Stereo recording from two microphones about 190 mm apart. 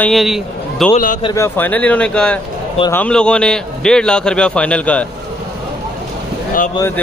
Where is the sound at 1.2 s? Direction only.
15° left (ahead or behind).